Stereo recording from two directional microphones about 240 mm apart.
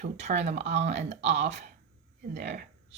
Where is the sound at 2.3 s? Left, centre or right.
Right.